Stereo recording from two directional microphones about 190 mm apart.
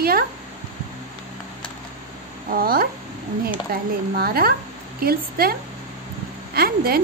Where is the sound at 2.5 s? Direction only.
50° right (ahead or behind).